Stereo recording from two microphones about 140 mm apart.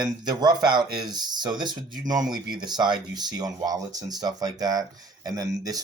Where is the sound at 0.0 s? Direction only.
30° right (ahead or behind).